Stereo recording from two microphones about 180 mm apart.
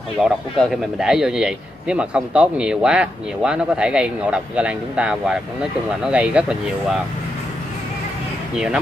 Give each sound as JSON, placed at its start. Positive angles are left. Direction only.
{"t": 0.2, "sound": "speech", "side_deg": 0}